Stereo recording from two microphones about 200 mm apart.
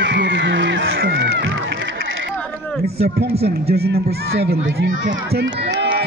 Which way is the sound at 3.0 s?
50° right (ahead or behind).